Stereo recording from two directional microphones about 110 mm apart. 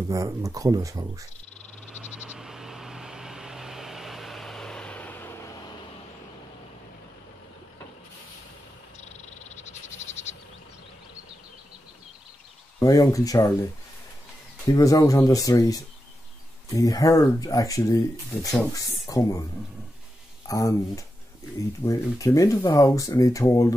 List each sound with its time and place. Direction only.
0.1 s speech: 30° right (ahead or behind)
1.9 s vehicle: 5° right (ahead or behind); by 5.6 s 25° left (ahead or behind)
9.6 s frog: 90° left
12.8 s speech: 35° left (ahead or behind)
14.7 s speech: 35° left (ahead or behind)
19.0 s speech: 30° left (ahead or behind)
20.4 s speech: 30° left (ahead or behind)